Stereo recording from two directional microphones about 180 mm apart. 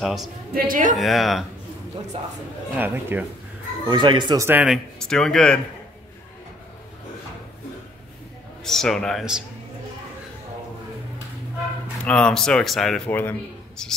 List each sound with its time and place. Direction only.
0.0 s a man's voice: centre (ahead or behind)
0.6 s a man's voice: 50° right (ahead or behind)
0.9 s a man's voice: centre (ahead or behind)
2.8 s speech: 10° right (ahead or behind)
3.8 s speech: 25° right (ahead or behind)
4.5 s speech: 10° right (ahead or behind)
4.9 s a man's voice: 5° left (ahead or behind)
8.6 s a man's voice: centre (ahead or behind)
12.0 s a man's voice: 5° left (ahead or behind)